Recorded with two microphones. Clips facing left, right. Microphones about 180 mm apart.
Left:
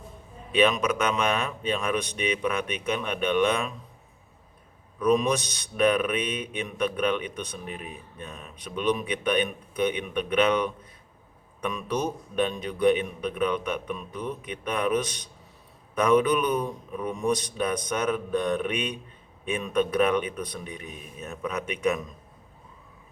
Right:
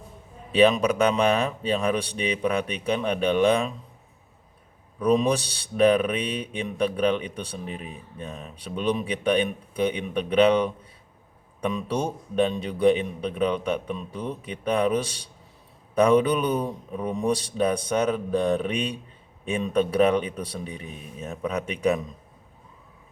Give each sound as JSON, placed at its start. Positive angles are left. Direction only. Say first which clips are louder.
{"t": 0.5, "sound": "mantra", "louder": "right 4 dB", "side_deg": -35}
{"t": 4.9, "sound": "mantra", "louder": "right 1 dB", "side_deg": -30}